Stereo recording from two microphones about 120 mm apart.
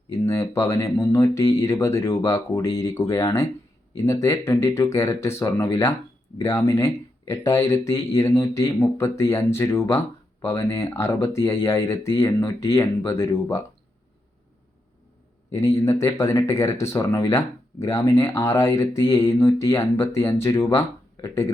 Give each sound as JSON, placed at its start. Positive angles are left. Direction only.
{"t": 0.3, "sound": "speech", "side_deg": 25}
{"t": 15.5, "sound": "speech", "side_deg": 25}